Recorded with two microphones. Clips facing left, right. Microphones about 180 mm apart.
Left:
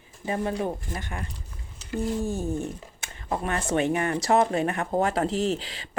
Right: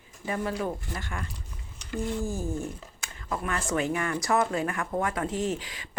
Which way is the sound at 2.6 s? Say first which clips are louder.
Left 3 dB; 25° left (ahead or behind).